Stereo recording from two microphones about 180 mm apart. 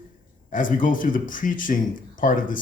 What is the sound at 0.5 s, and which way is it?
Speech, 50° left (ahead or behind).